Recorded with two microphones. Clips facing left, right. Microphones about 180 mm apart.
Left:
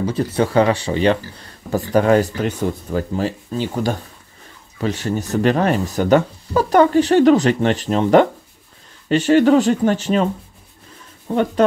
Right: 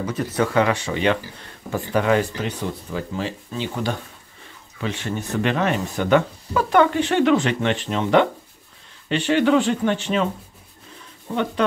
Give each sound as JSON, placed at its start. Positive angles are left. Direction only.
{"t": 0.0, "sound": "speech", "side_deg": 30}
{"t": 11.3, "sound": "speech", "side_deg": 35}